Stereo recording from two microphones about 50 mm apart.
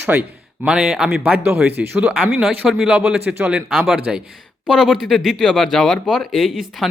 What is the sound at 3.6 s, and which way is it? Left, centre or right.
Speech, centre.